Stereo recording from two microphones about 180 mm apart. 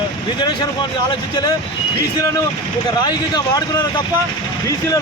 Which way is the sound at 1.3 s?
20° left (ahead or behind).